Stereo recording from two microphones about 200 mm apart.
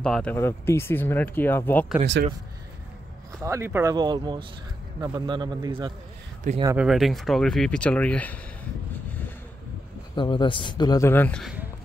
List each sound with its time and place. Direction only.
0.0 s speech: 5° left (ahead or behind)
3.4 s speech: 15° right (ahead or behind)
6.5 s speech: 40° right (ahead or behind)
6.8 s speech: centre (ahead or behind)
10.1 s speech: 25° left (ahead or behind); by 11.5 s 5° left (ahead or behind)